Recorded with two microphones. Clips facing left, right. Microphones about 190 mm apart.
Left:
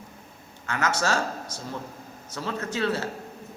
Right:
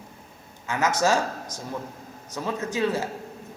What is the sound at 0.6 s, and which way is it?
A man's voice, 15° right (ahead or behind).